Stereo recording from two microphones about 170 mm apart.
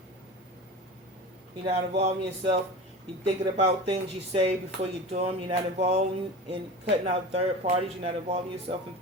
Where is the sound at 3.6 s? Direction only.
40° right (ahead or behind).